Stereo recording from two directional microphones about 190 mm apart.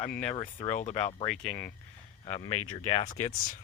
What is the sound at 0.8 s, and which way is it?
Speech, 35° left (ahead or behind).